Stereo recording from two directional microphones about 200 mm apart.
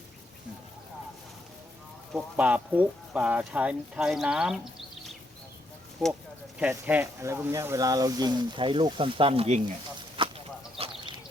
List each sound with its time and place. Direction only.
2.1 s speech: 5° right (ahead or behind)
6.6 s speech: 10° right (ahead or behind); by 9.6 s 30° right (ahead or behind)
10.2 s a sound: 30° right (ahead or behind)